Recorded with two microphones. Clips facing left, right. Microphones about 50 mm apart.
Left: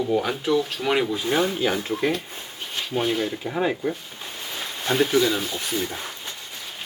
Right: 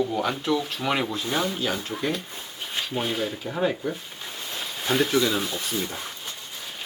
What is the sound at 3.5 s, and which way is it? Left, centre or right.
Speech, left.